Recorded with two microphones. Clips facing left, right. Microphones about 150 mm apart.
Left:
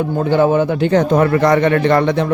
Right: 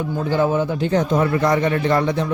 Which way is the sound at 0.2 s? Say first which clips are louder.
Left 5 dB; 65° left (ahead or behind).